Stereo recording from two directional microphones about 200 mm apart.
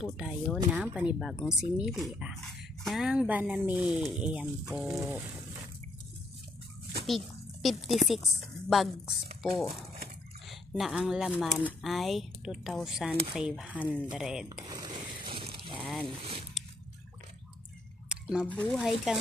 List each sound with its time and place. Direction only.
0.0 s speech: centre (ahead or behind)
5.0 s speech: 15° right (ahead or behind)
7.1 s speech: centre (ahead or behind)
13.7 s speech: 10° left (ahead or behind)
14.0 s speech: 5° right (ahead or behind)
14.7 s boat: 20° right (ahead or behind)
15.8 s boat: centre (ahead or behind)
16.2 s zipper: 25° right (ahead or behind)
18.0 s a sound: 5° right (ahead or behind)
18.5 s speech: 5° left (ahead or behind)